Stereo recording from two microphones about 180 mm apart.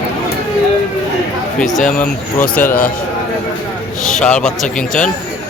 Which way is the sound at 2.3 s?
5° left (ahead or behind).